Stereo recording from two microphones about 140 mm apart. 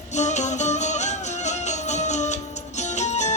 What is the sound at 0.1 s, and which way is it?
Music, 55° left (ahead or behind).